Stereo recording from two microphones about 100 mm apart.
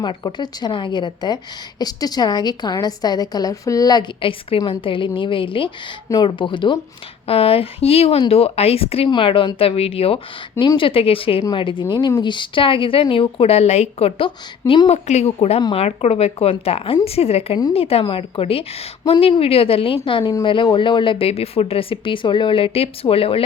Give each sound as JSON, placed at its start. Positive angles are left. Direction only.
{"t": 0.2, "sound": "a woman's voice", "side_deg": 45}
{"t": 4.2, "sound": "a woman's voice", "side_deg": 70}
{"t": 7.3, "sound": "speech", "side_deg": 75}
{"t": 9.0, "sound": "speech", "side_deg": 60}
{"t": 9.6, "sound": "speech", "side_deg": 75}
{"t": 10.8, "sound": "speech", "side_deg": 65}
{"t": 11.5, "sound": "speech", "side_deg": 55}
{"t": 14.8, "sound": "speech", "side_deg": 90}
{"t": 17.2, "sound": "speech", "side_deg": 90}
{"t": 17.7, "sound": "speech", "side_deg": 75}
{"t": 20.2, "sound": "speech", "side_deg": 45}